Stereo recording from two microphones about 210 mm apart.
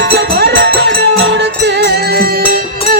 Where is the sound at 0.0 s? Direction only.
50° right (ahead or behind).